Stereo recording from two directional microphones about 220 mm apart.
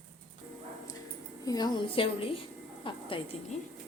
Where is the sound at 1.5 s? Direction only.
20° left (ahead or behind).